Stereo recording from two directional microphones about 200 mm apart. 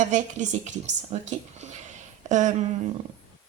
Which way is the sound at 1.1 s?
35° right (ahead or behind).